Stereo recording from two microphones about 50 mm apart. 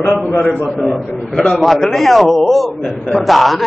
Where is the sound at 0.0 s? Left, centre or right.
Left.